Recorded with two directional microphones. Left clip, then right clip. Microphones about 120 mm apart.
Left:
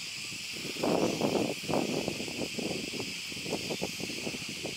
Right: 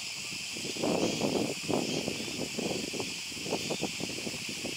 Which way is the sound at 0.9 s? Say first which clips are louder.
Left 2 dB; 65° right (ahead or behind).